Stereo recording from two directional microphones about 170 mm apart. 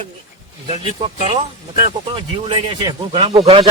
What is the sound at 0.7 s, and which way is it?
Speech, 35° right (ahead or behind).